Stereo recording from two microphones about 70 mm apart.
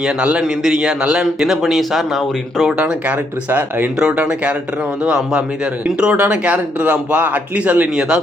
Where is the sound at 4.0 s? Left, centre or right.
Centre.